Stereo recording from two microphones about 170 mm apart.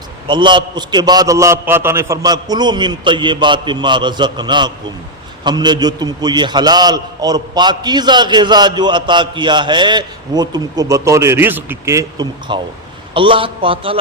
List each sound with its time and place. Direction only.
0.3 s a man's voice: 25° right (ahead or behind)